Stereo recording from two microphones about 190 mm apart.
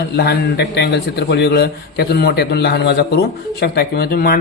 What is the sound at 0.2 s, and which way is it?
A man's voice, 60° left (ahead or behind).